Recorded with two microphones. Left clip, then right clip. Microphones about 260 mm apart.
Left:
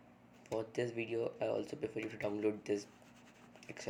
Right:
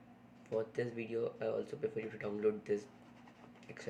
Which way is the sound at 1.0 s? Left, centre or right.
Left.